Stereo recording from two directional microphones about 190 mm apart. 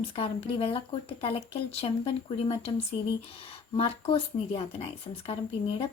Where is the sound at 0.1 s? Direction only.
30° left (ahead or behind).